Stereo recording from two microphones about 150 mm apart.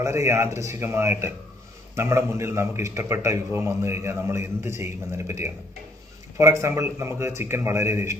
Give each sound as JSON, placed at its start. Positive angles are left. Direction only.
{"t": 0.0, "sound": "a man's voice", "side_deg": -20}